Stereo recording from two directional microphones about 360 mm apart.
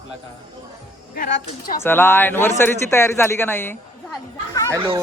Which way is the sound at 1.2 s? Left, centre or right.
Left.